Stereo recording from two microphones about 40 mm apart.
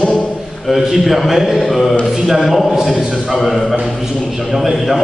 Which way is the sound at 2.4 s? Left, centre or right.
Centre.